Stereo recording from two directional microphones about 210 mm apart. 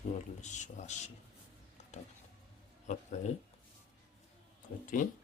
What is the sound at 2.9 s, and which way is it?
Speech, 35° left (ahead or behind).